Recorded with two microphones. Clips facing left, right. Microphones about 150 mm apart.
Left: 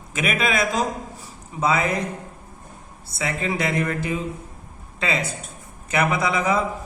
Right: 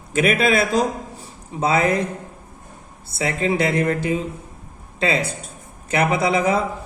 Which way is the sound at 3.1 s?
30° right (ahead or behind).